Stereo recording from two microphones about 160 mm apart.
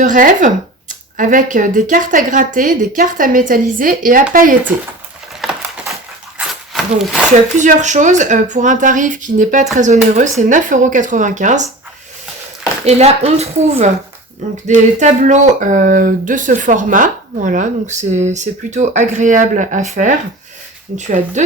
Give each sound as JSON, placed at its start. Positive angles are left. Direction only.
{"t": 0.0, "sound": "a woman's voice", "side_deg": -60}
{"t": 5.4, "sound": "wood", "side_deg": 0}
{"t": 7.5, "sound": "speech", "side_deg": -50}
{"t": 12.8, "sound": "speech", "side_deg": -40}